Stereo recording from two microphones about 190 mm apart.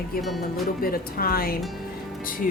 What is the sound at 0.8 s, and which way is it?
Speech, 50° left (ahead or behind).